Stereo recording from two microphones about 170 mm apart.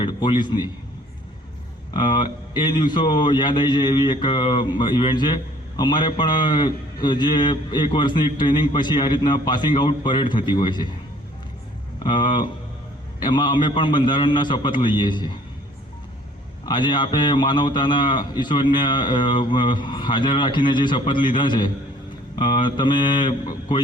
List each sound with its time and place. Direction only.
0.0 s speech: 25° left (ahead or behind)
1.9 s speech: 25° left (ahead or behind)
12.0 s speech: 30° left (ahead or behind)
16.6 s speech: 25° left (ahead or behind)